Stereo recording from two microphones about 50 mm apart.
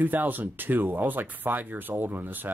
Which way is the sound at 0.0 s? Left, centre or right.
Right.